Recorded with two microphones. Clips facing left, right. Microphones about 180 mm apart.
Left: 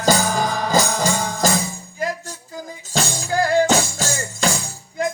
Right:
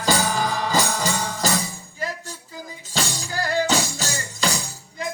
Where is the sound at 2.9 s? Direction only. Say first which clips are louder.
Left 6 dB; 45° left (ahead or behind).